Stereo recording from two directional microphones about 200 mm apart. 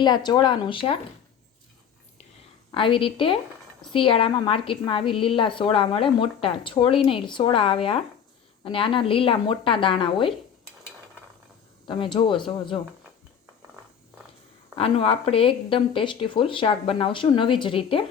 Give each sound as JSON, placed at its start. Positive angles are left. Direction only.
{"t": 0.0, "sound": "a woman's voice", "side_deg": 20}
{"t": 2.7, "sound": "a woman's voice", "side_deg": 25}
{"t": 11.9, "sound": "a woman's voice", "side_deg": 25}
{"t": 14.8, "sound": "a woman's voice", "side_deg": 30}